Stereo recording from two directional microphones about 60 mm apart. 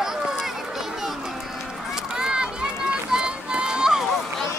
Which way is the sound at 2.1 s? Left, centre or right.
Centre.